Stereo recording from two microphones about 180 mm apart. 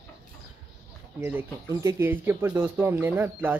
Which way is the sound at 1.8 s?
15° right (ahead or behind).